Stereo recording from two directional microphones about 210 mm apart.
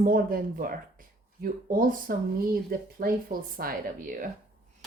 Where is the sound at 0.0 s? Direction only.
40° right (ahead or behind).